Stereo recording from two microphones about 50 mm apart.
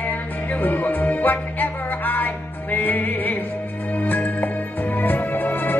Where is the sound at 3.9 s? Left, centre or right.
Left.